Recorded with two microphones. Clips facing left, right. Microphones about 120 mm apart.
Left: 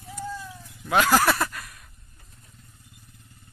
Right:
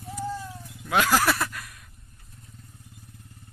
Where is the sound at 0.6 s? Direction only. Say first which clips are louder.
Left 2 dB; centre (ahead or behind).